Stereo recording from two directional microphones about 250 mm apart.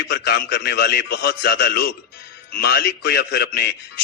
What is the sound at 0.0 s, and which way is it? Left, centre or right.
A man's voice, left.